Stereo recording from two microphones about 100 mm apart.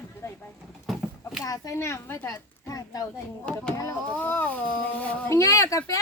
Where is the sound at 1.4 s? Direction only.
35° left (ahead or behind).